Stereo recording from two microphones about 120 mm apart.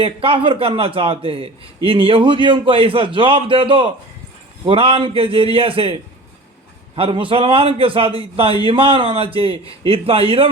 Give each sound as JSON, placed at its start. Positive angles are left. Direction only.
{"t": 0.0, "sound": "a man's voice", "side_deg": -50}